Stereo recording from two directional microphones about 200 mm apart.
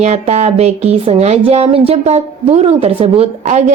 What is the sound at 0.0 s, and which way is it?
A woman's voice, 35° right (ahead or behind).